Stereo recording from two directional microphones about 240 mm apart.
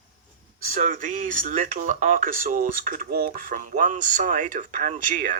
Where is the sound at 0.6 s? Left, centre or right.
Right.